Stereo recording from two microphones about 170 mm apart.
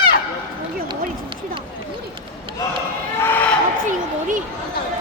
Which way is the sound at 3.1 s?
10° left (ahead or behind).